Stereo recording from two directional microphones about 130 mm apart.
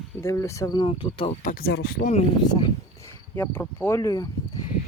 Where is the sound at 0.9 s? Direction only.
45° left (ahead or behind).